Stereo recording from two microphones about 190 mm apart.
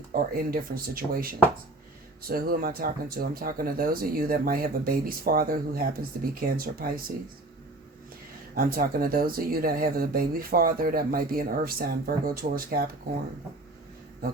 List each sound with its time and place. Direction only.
0.1 s speech: 50° right (ahead or behind)
8.5 s speech: 50° right (ahead or behind)